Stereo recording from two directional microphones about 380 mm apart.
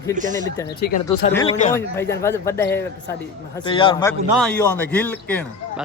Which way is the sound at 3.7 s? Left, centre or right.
Centre.